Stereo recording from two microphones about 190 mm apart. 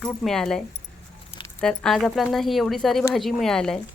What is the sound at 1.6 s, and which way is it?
Speech, 5° left (ahead or behind).